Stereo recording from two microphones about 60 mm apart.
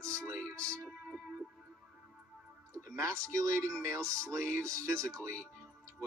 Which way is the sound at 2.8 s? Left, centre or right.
Right.